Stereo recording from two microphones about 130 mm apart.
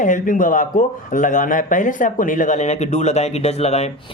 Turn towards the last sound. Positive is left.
turn(degrees=55)  # may be behind; listen again after turning